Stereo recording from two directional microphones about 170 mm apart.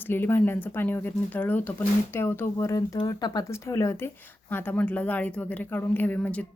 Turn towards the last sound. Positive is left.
turn(degrees=10)  # may be behind; listen again after turning